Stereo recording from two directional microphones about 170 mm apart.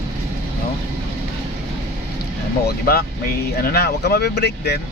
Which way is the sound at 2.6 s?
65° left (ahead or behind).